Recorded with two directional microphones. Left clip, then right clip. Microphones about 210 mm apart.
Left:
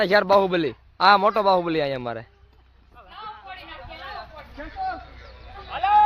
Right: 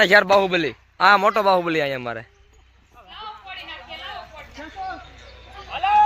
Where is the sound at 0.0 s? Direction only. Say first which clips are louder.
Right 5 dB; centre (ahead or behind).